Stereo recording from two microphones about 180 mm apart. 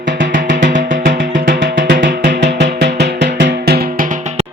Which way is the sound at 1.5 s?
75° right (ahead or behind).